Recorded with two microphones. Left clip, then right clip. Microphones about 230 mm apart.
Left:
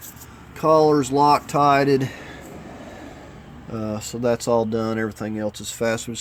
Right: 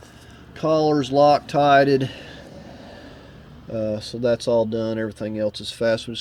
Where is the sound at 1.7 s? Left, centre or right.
Centre.